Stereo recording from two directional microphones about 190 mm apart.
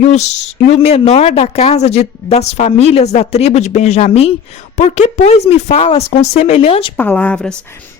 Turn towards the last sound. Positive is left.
turn(degrees=5)  # may be behind; listen again after turning